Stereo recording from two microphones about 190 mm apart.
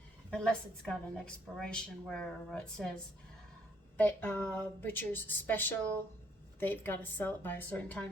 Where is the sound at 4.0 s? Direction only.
10° left (ahead or behind).